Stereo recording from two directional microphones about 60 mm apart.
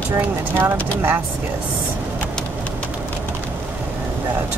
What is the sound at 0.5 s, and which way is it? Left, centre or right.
Speech, right.